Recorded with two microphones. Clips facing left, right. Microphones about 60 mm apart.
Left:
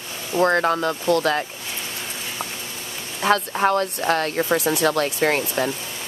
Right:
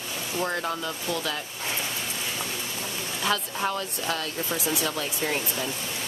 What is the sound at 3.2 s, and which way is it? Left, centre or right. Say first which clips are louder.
Speech: left 9 dB; left.